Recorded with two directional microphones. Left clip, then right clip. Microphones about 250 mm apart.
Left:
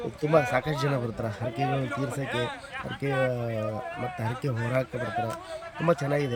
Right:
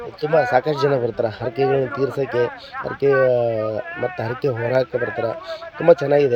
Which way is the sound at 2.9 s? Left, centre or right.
Centre.